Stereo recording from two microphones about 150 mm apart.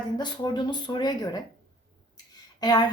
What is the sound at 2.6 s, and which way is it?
Speech, 25° left (ahead or behind).